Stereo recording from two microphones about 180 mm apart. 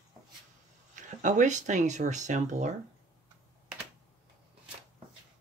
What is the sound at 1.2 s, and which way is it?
Speech, 45° right (ahead or behind).